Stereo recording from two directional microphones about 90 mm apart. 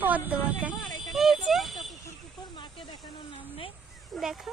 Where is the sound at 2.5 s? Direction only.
60° left (ahead or behind).